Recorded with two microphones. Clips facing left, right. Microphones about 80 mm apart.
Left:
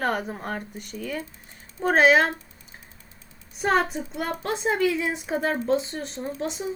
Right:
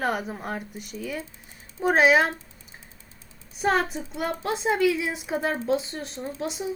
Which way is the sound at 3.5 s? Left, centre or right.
Centre.